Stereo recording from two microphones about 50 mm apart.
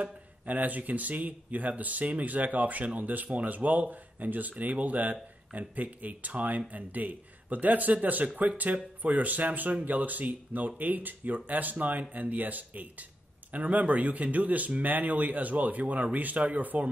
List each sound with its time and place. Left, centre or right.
0.0 s speech: right